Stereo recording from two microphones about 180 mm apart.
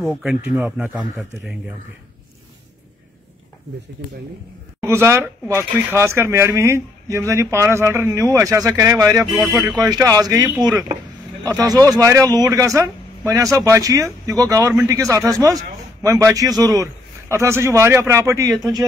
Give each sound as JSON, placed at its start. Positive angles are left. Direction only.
{"t": 0.0, "sound": "a man's voice", "side_deg": -5}
{"t": 4.0, "sound": "speech", "side_deg": -65}
{"t": 4.8, "sound": "speech", "side_deg": -15}